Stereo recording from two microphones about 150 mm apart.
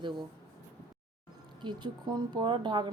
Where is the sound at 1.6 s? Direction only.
30° right (ahead or behind).